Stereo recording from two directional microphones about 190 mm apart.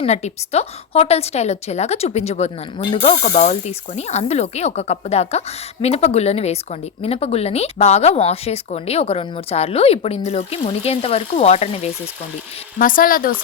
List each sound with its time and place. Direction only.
0.0 s a woman's voice: 35° left (ahead or behind)
12.8 s speech: 45° left (ahead or behind)